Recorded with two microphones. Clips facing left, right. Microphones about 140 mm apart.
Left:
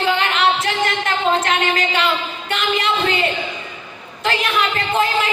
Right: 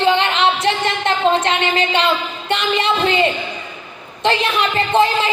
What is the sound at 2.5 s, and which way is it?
Speech, 25° right (ahead or behind).